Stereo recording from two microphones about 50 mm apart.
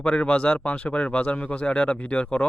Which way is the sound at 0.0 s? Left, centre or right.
Left.